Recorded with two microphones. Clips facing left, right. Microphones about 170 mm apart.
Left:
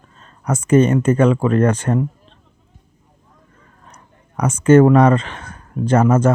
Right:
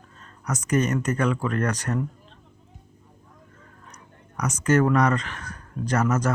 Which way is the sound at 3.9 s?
30° left (ahead or behind).